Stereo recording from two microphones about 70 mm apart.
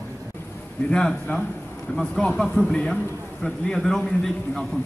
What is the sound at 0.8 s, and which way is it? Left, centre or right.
A man's voice, centre.